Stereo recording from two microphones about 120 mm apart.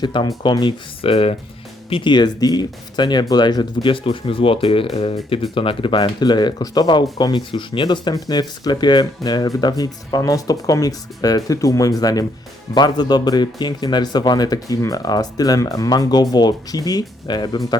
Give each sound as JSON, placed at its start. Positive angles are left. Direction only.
{"t": 0.0, "sound": "speech", "side_deg": 40}
{"t": 1.1, "sound": "speech", "side_deg": 55}
{"t": 1.9, "sound": "speech", "side_deg": 40}